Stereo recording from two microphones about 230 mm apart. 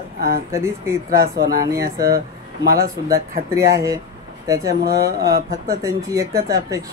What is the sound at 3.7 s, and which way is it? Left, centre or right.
Speech, centre.